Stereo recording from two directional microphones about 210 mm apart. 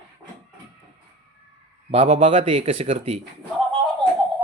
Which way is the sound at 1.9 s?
35° right (ahead or behind).